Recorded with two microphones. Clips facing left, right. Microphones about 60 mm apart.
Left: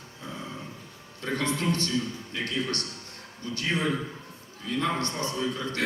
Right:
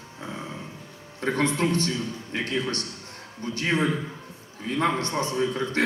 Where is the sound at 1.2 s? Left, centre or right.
Right.